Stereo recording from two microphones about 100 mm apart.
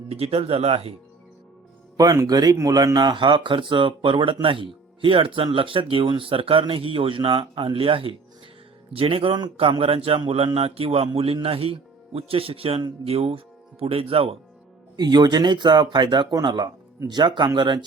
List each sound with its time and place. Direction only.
0.1 s speech: 80° right
2.0 s speech: 35° right (ahead or behind); by 12.8 s 70° right (ahead or behind)
13.1 s speech: 80° right
14.9 s speech: 45° right (ahead or behind)